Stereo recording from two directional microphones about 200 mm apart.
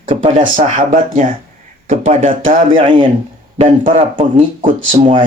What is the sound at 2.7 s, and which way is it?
Speech, 25° right (ahead or behind).